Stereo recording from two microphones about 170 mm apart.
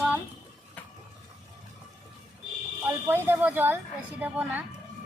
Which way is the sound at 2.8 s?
15° right (ahead or behind).